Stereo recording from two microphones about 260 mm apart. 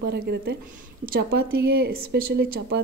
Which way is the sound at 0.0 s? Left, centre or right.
Right.